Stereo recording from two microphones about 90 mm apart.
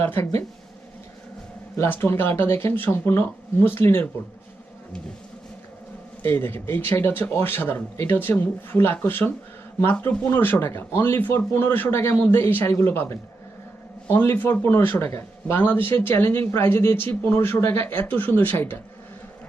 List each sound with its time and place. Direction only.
0.0 s speech: 25° left (ahead or behind)
1.7 s speech: 25° left (ahead or behind)
6.2 s speech: 25° left (ahead or behind)